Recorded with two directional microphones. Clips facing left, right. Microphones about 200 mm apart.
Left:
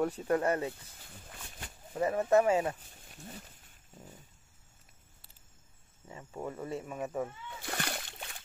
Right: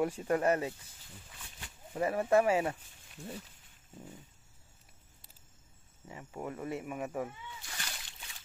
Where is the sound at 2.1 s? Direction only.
10° right (ahead or behind).